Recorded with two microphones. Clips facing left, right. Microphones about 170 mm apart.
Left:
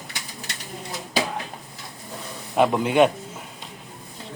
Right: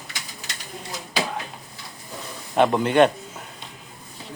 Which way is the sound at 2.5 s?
5° left (ahead or behind).